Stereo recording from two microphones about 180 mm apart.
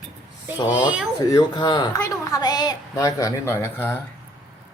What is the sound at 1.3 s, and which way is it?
A woman's voice, 25° left (ahead or behind).